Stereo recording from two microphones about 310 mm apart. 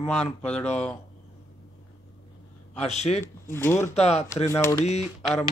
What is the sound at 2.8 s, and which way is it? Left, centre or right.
Speech, left.